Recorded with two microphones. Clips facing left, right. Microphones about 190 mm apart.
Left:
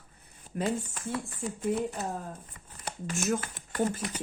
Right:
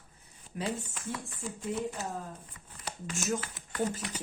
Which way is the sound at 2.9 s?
55° left (ahead or behind).